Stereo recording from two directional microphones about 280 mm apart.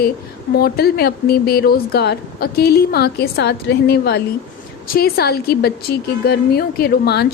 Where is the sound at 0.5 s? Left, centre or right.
Left.